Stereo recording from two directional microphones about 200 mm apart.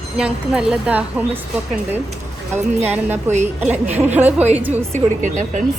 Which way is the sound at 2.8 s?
10° right (ahead or behind).